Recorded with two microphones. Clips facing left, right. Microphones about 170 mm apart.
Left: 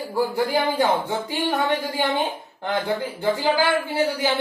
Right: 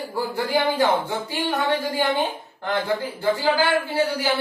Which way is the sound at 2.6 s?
15° left (ahead or behind).